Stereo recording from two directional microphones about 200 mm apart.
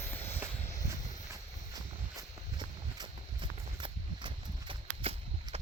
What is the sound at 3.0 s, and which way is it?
Horse, 25° right (ahead or behind).